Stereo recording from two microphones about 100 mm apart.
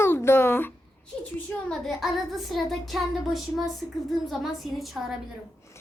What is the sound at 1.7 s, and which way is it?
Child singing, centre (ahead or behind).